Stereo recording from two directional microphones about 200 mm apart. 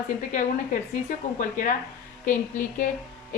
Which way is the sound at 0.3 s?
40° left (ahead or behind).